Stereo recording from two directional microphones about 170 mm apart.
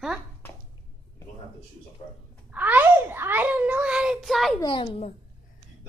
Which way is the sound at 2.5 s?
10° right (ahead or behind).